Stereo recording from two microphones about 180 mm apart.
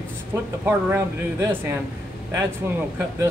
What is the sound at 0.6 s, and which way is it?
Speech, 15° right (ahead or behind).